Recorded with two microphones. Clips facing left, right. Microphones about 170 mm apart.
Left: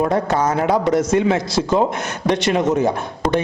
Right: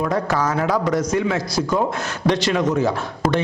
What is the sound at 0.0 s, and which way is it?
A man's voice, 25° left (ahead or behind).